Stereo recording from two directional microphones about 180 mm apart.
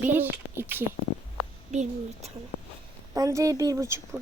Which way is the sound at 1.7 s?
35° right (ahead or behind).